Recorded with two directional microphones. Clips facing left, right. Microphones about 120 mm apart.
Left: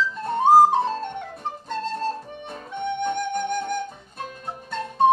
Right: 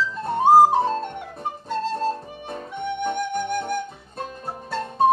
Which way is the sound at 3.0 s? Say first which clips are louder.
Right 1 dB; 5° right (ahead or behind).